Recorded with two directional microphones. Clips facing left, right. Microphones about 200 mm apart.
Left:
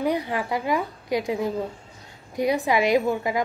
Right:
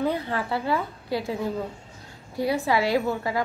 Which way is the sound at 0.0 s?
15° left (ahead or behind).